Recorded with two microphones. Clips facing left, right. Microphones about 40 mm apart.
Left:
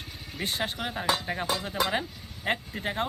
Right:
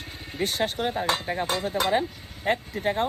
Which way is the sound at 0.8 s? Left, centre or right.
Left.